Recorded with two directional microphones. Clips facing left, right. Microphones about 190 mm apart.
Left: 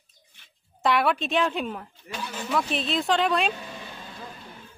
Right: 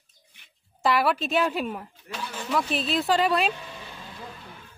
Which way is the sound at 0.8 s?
Centre (ahead or behind).